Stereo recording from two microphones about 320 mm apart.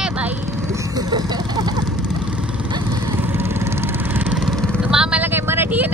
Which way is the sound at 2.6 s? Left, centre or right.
Centre.